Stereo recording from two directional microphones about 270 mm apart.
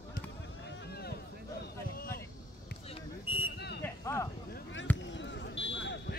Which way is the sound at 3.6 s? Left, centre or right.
Left.